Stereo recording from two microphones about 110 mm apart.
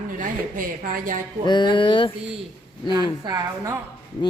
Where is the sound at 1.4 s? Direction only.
45° left (ahead or behind).